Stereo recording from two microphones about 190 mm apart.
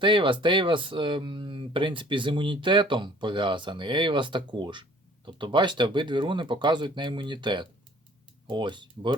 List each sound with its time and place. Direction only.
0.0 s speech: 25° right (ahead or behind)